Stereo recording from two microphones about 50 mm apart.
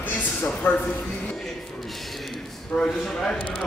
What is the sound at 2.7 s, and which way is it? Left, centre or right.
Speech, centre.